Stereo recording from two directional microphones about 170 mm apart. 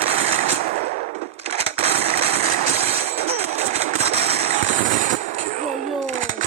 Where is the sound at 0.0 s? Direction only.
35° right (ahead or behind).